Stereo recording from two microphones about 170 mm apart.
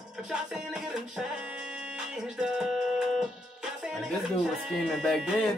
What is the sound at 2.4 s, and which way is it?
Music, centre (ahead or behind).